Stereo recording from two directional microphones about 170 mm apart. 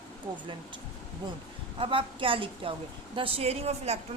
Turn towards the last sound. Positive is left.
turn(degrees=-35)  # may be behind; listen again after turning